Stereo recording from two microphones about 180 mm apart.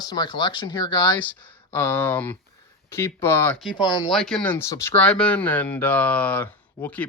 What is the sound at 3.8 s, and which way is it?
Speech, 25° left (ahead or behind).